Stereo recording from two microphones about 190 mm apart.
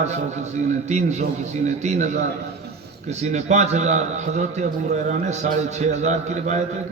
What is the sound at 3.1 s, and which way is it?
A man's voice, 35° right (ahead or behind).